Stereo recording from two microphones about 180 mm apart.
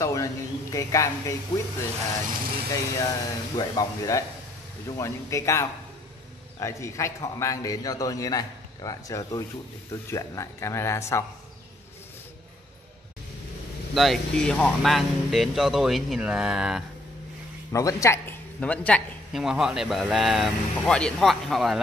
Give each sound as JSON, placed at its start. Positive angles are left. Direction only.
{"t": 0.0, "sound": "speech", "side_deg": 15}
{"t": 2.7, "sound": "a man's voice", "side_deg": 20}
{"t": 13.9, "sound": "speech", "side_deg": 0}
{"t": 17.7, "sound": "speech", "side_deg": 15}